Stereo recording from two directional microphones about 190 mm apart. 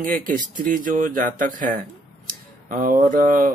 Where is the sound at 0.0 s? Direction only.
45° right (ahead or behind).